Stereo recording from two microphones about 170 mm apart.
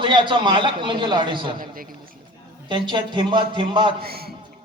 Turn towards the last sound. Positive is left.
turn(degrees=-65)  # may be behind; listen again after turning